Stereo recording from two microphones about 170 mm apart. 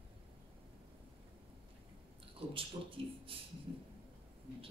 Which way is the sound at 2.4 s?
30° right (ahead or behind).